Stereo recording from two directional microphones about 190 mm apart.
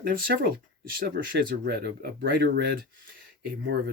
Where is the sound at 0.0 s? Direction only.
50° right (ahead or behind).